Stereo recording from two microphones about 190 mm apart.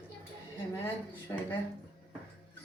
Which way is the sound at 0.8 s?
10° left (ahead or behind).